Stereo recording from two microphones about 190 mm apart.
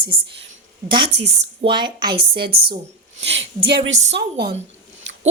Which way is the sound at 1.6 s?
25° right (ahead or behind).